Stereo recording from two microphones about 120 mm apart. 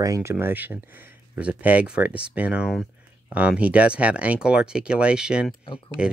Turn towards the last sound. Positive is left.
turn(degrees=-10)  # may be behind; listen again after turning